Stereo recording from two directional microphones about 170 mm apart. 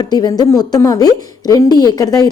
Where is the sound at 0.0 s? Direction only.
25° left (ahead or behind).